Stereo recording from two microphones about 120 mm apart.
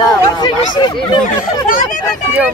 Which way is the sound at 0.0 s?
35° left (ahead or behind).